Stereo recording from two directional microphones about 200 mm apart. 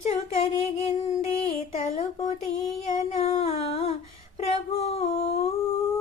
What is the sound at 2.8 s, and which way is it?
Music, 30° left (ahead or behind).